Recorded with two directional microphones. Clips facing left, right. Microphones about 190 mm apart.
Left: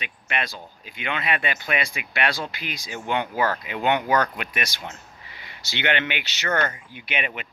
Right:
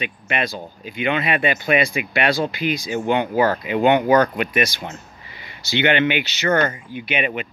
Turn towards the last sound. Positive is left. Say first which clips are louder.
# right 7 dB
turn(degrees=-5)  # may be behind; listen again after turning